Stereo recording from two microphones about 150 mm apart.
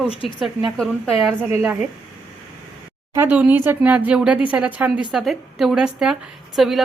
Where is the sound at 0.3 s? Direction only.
Centre (ahead or behind).